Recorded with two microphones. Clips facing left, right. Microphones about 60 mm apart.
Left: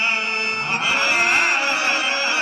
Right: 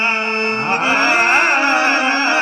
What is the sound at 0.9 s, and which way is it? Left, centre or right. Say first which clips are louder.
Carnatic music: right 4 dB; right.